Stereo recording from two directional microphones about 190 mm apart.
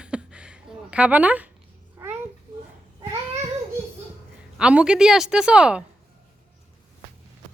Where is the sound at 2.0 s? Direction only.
10° right (ahead or behind).